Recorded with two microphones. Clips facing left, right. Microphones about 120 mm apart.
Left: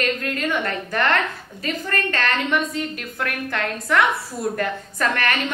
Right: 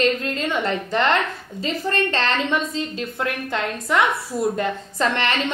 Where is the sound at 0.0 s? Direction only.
25° right (ahead or behind).